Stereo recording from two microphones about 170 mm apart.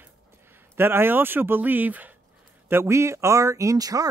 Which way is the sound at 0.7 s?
10° right (ahead or behind).